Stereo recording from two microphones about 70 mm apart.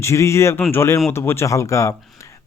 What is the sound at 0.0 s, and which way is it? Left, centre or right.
Speech, left.